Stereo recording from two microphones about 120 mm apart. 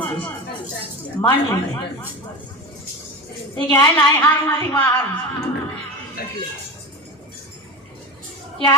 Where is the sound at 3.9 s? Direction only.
20° left (ahead or behind).